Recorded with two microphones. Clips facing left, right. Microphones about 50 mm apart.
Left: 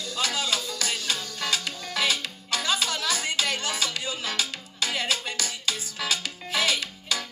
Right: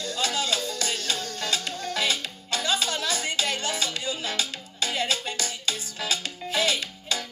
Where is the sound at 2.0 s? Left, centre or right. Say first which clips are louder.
Left 2 dB; left.